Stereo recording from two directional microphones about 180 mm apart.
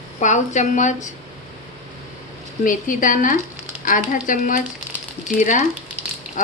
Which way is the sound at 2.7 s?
50° left (ahead or behind).